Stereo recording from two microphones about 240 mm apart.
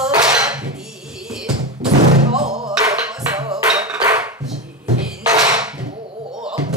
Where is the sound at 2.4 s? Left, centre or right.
Centre.